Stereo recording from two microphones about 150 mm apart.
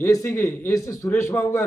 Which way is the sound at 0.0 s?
20° left (ahead or behind).